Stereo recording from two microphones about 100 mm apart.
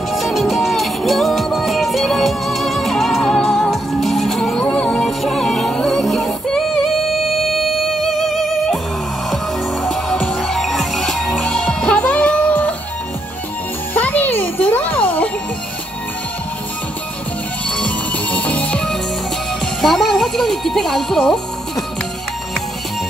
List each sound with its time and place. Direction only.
0.1 s music: centre (ahead or behind)
10.4 s music: centre (ahead or behind)
13.9 s music: 15° left (ahead or behind)
17.6 s music: 10° left (ahead or behind)